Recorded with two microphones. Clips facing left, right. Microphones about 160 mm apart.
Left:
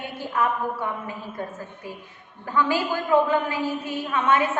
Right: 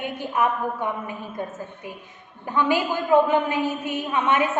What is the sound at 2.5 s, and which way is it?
A woman's voice, 20° right (ahead or behind).